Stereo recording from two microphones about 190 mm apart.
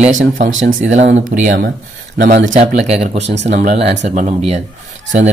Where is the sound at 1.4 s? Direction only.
50° right (ahead or behind).